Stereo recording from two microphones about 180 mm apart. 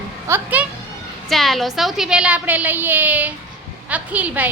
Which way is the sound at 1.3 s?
Centre (ahead or behind).